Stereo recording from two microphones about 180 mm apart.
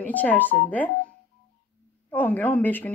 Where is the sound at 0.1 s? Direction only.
10° left (ahead or behind).